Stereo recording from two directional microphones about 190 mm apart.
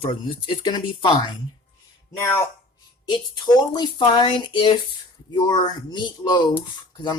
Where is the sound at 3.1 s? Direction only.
20° left (ahead or behind).